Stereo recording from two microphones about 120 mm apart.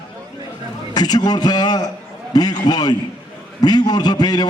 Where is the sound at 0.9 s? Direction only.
35° left (ahead or behind).